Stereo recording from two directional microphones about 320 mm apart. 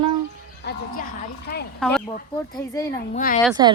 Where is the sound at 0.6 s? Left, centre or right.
Left.